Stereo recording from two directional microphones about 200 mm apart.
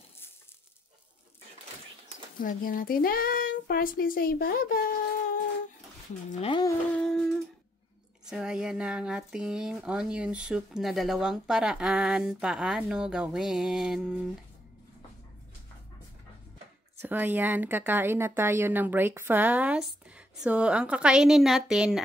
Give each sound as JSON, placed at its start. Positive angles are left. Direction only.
{"t": 2.4, "sound": "speech", "side_deg": 45}
{"t": 6.4, "sound": "speech", "side_deg": 25}
{"t": 6.9, "sound": "humming", "side_deg": 5}
{"t": 8.3, "sound": "speech", "side_deg": -5}
{"t": 17.0, "sound": "speech", "side_deg": -10}